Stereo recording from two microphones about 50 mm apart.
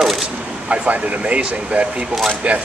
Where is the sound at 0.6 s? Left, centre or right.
Right.